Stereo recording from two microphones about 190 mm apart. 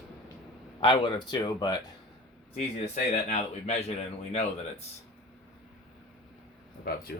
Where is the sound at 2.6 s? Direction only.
45° left (ahead or behind).